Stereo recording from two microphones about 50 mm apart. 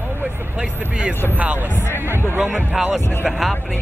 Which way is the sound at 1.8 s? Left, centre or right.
Left.